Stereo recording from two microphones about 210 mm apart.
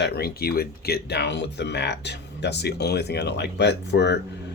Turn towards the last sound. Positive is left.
turn(degrees=55)  # may be behind; listen again after turning